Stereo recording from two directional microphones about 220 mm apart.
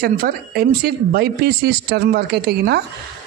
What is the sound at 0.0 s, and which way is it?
Speech, 40° right (ahead or behind).